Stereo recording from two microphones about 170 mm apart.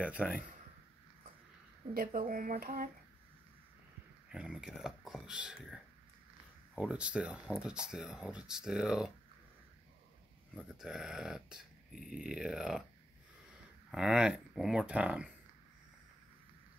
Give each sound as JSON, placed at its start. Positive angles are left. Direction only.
{"t": 0.0, "sound": "speech", "side_deg": -5}
{"t": 2.0, "sound": "speech", "side_deg": -55}
{"t": 4.3, "sound": "speech", "side_deg": -5}
{"t": 10.5, "sound": "speech", "side_deg": -5}
{"t": 13.8, "sound": "speech", "side_deg": -5}